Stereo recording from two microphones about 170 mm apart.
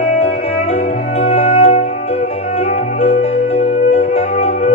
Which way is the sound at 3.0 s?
35° left (ahead or behind).